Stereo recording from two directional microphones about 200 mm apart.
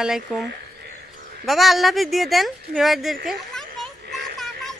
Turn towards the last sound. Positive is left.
turn(degrees=0)  # may be behind; listen again after turning